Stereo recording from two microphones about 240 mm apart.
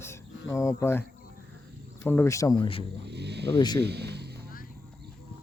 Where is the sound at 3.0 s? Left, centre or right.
Right.